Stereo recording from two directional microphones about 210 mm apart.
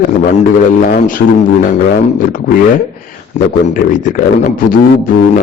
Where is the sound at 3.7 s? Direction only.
40° left (ahead or behind).